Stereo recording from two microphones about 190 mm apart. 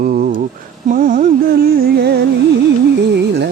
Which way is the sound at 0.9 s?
45° right (ahead or behind).